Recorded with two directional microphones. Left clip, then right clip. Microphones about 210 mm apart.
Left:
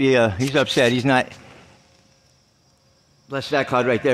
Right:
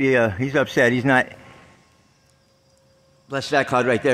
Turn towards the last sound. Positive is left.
turn(degrees=0)  # may be behind; listen again after turning